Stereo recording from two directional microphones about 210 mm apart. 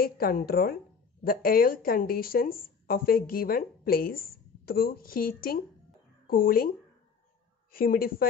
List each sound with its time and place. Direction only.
0.0 s speech: 45° left (ahead or behind)
7.7 s speech: 45° left (ahead or behind)